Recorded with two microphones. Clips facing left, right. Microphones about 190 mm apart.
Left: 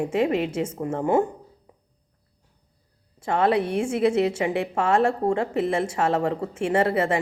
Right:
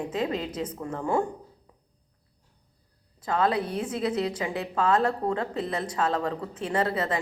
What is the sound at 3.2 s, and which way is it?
Speech, 25° left (ahead or behind).